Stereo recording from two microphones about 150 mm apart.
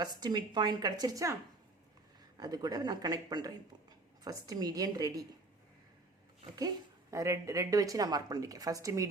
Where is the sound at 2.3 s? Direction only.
25° right (ahead or behind).